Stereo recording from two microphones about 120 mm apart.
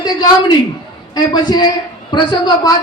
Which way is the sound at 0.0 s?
35° left (ahead or behind).